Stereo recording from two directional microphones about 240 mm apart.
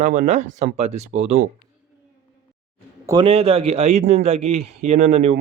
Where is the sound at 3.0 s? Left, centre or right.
Centre.